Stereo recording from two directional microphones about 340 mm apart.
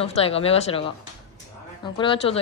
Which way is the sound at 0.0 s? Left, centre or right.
Centre.